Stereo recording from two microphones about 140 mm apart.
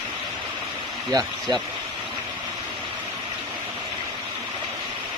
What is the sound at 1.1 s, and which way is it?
Speech, 25° right (ahead or behind).